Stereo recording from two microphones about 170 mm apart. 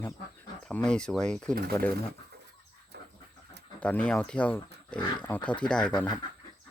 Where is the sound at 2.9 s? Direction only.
75° right (ahead or behind).